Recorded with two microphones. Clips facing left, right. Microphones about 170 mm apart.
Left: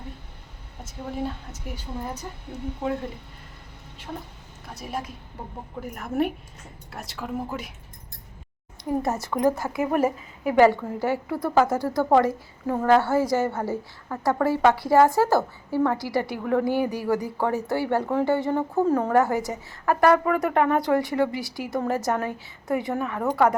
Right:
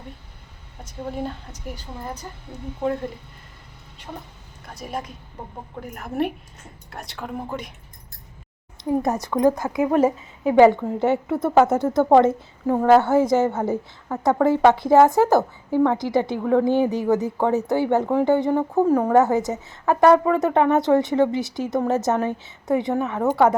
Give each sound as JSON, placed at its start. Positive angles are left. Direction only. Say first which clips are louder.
{"t": 0.9, "sound": "a woman's voice", "louder": "right 1 dB", "side_deg": 0}
{"t": 4.6, "sound": "a woman's voice", "louder": "right 1 dB", "side_deg": 0}
{"t": 8.8, "sound": "a woman's voice", "louder": "right 4 dB", "side_deg": -20}
{"t": 22.9, "sound": "a woman's voice", "louder": "right 4 dB", "side_deg": -5}